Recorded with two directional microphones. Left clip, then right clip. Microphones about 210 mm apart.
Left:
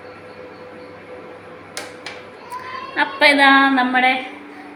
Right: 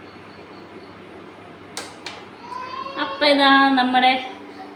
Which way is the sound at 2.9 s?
40° left (ahead or behind).